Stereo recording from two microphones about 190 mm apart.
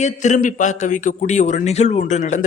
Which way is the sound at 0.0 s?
40° left (ahead or behind).